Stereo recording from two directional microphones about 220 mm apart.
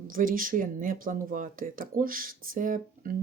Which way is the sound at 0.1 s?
40° right (ahead or behind).